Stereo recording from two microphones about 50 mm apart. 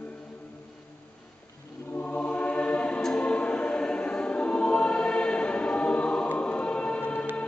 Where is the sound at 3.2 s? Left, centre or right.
Left.